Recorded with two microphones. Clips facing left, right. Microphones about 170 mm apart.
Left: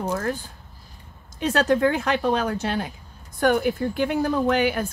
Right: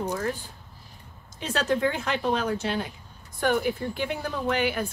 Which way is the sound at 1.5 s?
50° left (ahead or behind).